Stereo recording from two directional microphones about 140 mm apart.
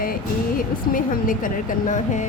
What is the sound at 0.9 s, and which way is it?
A woman's voice, 75° left (ahead or behind).